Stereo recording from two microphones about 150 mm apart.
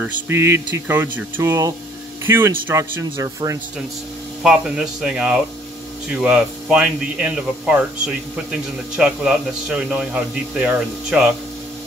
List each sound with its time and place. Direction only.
0.0 s speech: 15° right (ahead or behind)
4.4 s speech: 5° right (ahead or behind)